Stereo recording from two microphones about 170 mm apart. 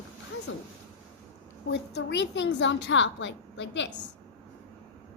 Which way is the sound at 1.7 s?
90° left.